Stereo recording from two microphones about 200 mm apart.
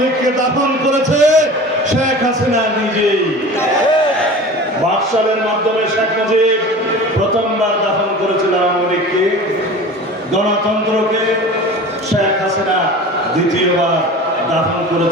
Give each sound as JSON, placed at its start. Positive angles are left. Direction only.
{"t": 0.9, "sound": "a man's voice", "side_deg": -35}